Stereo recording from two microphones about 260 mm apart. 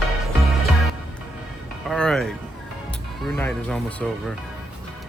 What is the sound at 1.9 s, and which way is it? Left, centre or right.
Music, centre.